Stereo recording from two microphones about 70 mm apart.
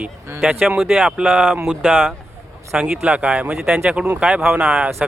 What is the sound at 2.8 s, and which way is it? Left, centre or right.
Speech, centre.